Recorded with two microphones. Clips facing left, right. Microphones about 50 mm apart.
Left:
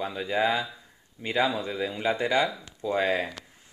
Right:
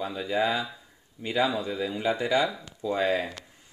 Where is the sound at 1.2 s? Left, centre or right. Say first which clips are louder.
Even; left.